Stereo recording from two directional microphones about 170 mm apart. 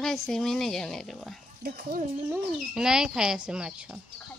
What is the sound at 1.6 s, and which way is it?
Speech, 60° right (ahead or behind).